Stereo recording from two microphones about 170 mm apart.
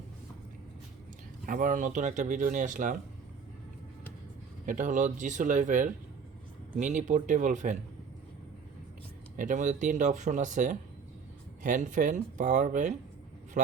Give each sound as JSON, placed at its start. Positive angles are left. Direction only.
{"t": 1.5, "sound": "speech", "side_deg": -50}
{"t": 4.6, "sound": "speech", "side_deg": -50}
{"t": 9.3, "sound": "speech", "side_deg": -50}